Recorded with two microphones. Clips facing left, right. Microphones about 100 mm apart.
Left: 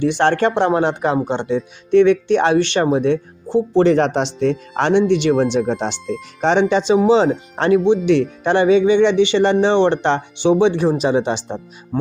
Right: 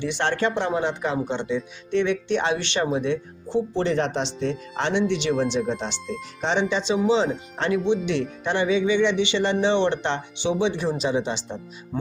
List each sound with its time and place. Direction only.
0.0 s speech: 55° left (ahead or behind)
7.8 s speech: centre (ahead or behind)
8.4 s speech: 55° left (ahead or behind)